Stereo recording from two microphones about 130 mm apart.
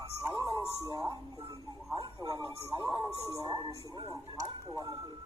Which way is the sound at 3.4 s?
35° right (ahead or behind).